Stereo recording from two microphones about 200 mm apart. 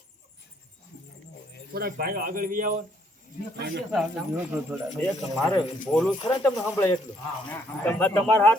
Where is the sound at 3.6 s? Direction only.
55° right (ahead or behind).